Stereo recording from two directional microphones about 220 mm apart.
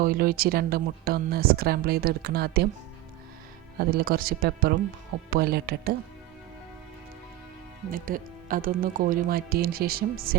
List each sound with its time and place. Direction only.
0.0 s speech: 40° right (ahead or behind)
3.8 s speech: 45° right (ahead or behind)
7.9 s speech: 40° right (ahead or behind)